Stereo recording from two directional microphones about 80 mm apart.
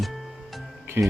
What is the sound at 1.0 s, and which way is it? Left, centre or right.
Speech, right.